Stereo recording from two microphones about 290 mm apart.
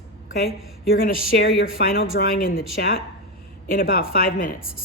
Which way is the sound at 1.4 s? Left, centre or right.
Left.